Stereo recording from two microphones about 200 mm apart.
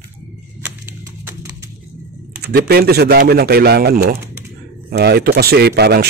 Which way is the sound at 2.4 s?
50° right (ahead or behind).